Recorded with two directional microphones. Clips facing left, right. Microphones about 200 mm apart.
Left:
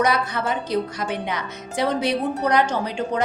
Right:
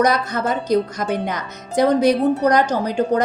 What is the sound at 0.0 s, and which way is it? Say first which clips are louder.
Speech: right 3 dB; 40° right (ahead or behind).